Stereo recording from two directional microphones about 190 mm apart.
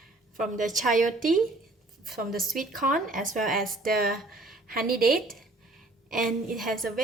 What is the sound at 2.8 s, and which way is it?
Speech, 45° right (ahead or behind).